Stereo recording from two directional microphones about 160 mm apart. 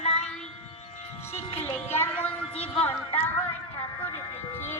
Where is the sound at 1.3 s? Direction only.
40° left (ahead or behind).